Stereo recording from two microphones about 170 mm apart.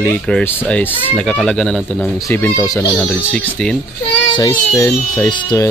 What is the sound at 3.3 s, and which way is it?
Speech, 5° left (ahead or behind).